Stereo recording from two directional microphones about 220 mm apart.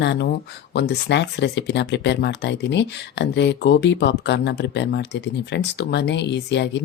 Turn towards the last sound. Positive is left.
turn(degrees=50)  # may be behind; listen again after turning